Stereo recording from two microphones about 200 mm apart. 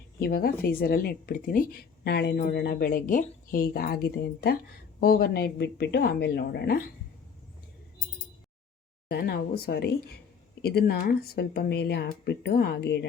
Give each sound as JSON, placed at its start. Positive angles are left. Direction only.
{"t": 0.2, "sound": "speech", "side_deg": 50}
{"t": 9.0, "sound": "speech", "side_deg": 50}